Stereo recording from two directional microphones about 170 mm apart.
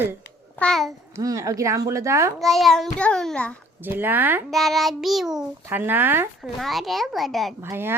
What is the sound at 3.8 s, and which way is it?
Speech, 10° right (ahead or behind).